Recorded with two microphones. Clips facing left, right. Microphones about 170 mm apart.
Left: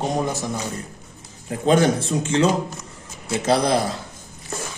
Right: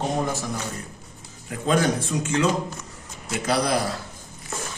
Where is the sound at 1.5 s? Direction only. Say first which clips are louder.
Left 5 dB; 30° left (ahead or behind).